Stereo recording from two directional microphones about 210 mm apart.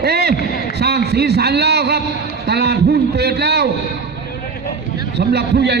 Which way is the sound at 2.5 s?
50° right (ahead or behind).